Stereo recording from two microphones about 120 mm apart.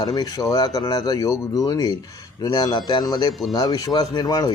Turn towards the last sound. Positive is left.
turn(degrees=35)  # may be behind; listen again after turning